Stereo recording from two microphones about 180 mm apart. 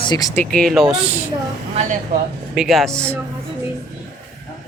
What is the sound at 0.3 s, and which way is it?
Speech, 5° left (ahead or behind).